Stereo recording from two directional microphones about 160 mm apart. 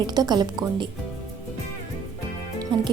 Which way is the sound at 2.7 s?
30° right (ahead or behind).